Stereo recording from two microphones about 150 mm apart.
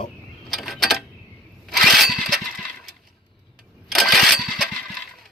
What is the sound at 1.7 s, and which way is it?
Tools, centre (ahead or behind).